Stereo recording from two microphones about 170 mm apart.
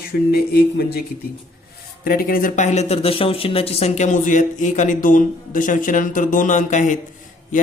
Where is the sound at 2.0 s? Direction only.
60° left (ahead or behind).